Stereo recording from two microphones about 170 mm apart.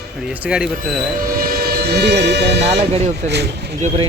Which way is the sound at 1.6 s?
75° right (ahead or behind).